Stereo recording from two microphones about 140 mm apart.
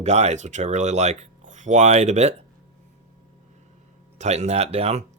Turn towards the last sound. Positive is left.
turn(degrees=-50)  # may be behind; listen again after turning